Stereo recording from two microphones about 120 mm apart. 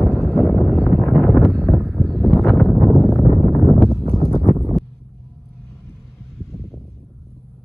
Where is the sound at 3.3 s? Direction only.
55° right (ahead or behind).